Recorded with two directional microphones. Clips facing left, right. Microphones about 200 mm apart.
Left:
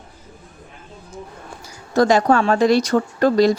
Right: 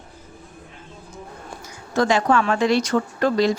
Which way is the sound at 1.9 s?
40° left (ahead or behind).